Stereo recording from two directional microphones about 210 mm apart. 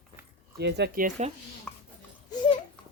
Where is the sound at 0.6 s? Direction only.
50° right (ahead or behind).